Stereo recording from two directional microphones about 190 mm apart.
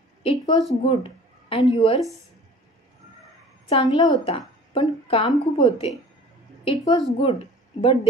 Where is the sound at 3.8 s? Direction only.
20° left (ahead or behind).